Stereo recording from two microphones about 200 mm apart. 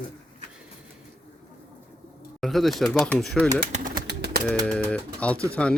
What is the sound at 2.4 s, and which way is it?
Speech, centre (ahead or behind).